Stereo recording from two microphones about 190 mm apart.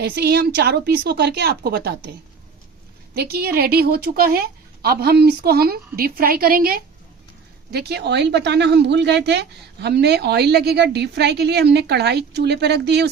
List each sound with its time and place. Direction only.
0.0 s speech: 55° right (ahead or behind)
3.2 s a woman's voice: 55° right (ahead or behind)